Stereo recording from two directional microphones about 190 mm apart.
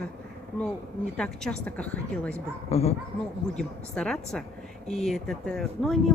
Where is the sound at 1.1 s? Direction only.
5° left (ahead or behind).